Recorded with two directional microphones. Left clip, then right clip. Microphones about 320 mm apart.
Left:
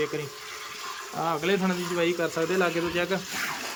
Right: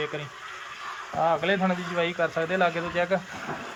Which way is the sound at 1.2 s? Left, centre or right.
Centre.